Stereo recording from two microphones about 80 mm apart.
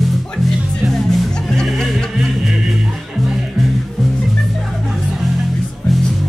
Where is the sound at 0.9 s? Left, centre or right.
Centre.